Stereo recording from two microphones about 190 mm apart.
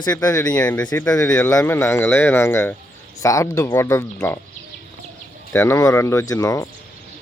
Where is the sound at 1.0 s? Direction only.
20° left (ahead or behind).